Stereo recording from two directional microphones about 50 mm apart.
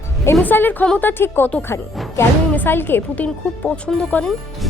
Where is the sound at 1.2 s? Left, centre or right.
Left.